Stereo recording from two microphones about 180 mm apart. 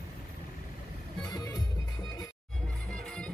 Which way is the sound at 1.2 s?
20° left (ahead or behind).